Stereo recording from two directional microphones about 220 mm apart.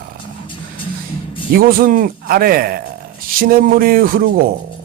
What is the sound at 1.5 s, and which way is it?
A man's voice, 40° right (ahead or behind).